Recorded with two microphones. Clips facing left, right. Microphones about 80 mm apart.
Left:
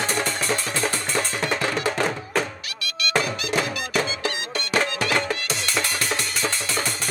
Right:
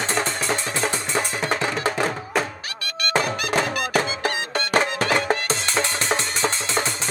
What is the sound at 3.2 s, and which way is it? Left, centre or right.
Music, right.